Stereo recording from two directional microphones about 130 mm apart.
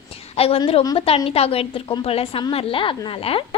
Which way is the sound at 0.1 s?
50° left (ahead or behind).